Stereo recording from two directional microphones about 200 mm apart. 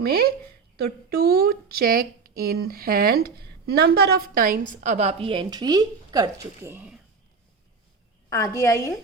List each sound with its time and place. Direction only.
0.0 s a woman's voice: 50° right (ahead or behind); by 7.0 s 10° right (ahead or behind)
8.6 s a woman's voice: 15° left (ahead or behind)